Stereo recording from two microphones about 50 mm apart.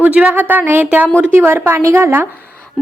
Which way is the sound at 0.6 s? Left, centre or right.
Right.